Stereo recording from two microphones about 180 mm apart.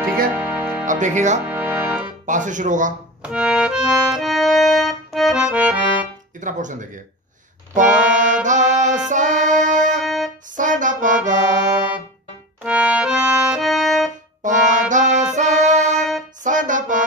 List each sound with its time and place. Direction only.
0.3 s music: 10° right (ahead or behind)
0.8 s speech: 45° right (ahead or behind)
1.4 s music: 10° right (ahead or behind)
2.2 s speech: 45° right (ahead or behind)
3.3 s accordion: 5° right (ahead or behind)
6.4 s speech: 45° right (ahead or behind)
7.7 s music: 45° right (ahead or behind)
10.0 s music: centre (ahead or behind)
10.5 s music: 45° right (ahead or behind)
12.6 s accordion: 5° right (ahead or behind)
14.4 s music: 45° right (ahead or behind)